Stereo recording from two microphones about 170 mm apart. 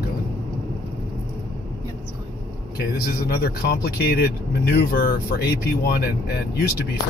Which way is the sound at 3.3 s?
65° left (ahead or behind).